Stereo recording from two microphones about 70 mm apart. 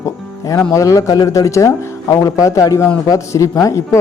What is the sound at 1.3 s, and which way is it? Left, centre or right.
Speech, left.